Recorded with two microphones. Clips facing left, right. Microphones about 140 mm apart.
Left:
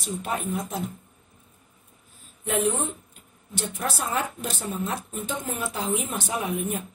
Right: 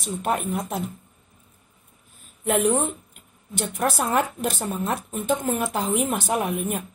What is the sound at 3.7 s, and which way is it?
Speech, 55° right (ahead or behind).